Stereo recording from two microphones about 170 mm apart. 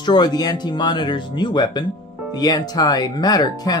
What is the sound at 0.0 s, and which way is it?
Speech, 25° left (ahead or behind).